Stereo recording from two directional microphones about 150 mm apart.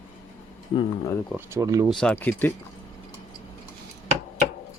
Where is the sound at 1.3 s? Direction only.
20° right (ahead or behind).